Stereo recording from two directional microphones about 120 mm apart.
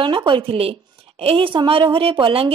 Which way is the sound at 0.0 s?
40° right (ahead or behind).